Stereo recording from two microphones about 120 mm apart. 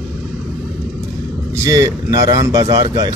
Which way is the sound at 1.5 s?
25° right (ahead or behind).